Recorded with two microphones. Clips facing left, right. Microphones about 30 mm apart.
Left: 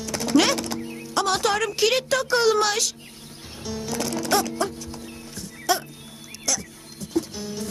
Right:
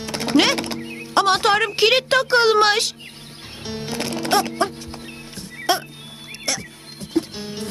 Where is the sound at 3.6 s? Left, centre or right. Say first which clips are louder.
Right 1 dB; right.